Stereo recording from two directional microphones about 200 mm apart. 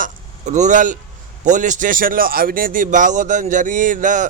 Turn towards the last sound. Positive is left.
turn(degrees=-40)  # may be behind; listen again after turning